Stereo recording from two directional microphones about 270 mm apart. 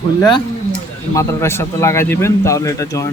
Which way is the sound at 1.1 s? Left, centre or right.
Centre.